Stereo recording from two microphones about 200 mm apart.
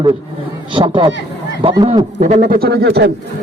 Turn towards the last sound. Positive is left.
turn(degrees=-55)  # may be behind; listen again after turning